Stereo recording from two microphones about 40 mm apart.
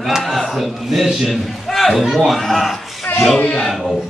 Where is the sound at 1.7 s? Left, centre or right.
Centre.